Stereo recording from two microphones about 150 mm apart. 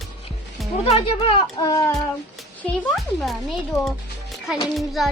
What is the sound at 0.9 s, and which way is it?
Speech, 35° left (ahead or behind).